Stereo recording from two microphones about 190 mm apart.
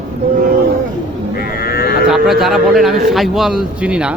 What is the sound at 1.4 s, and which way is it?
Livestock, 50° left (ahead or behind).